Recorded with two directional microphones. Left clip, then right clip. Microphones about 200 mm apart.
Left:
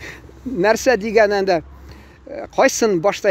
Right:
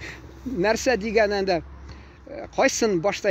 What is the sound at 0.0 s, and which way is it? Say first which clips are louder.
Speech: left 4 dB; 35° left (ahead or behind).